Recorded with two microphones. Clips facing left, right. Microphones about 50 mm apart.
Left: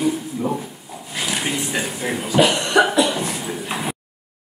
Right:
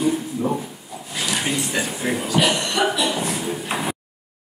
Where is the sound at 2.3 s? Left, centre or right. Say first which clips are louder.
Left 6 dB; left.